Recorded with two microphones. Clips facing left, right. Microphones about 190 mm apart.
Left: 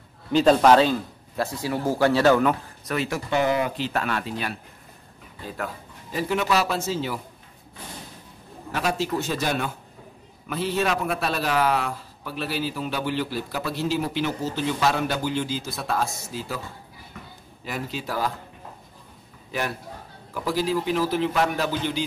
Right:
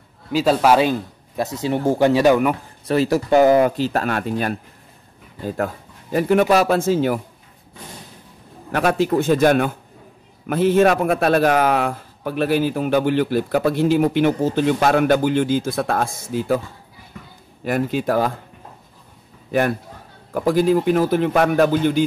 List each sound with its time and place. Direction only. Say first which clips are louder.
0.3 s speech: even; 5° right (ahead or behind)
2.8 s a man's voice: right 9 dB; 35° right (ahead or behind); by 7.2 s 55° right (ahead or behind)
8.7 s a man's voice: right 8 dB; 55° right (ahead or behind)
17.6 s a man's voice: right 11 dB; 55° right (ahead or behind)
20.3 s a man's voice: right 8 dB; 50° right (ahead or behind)